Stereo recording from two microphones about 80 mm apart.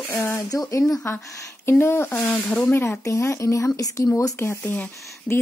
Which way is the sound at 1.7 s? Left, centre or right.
Left.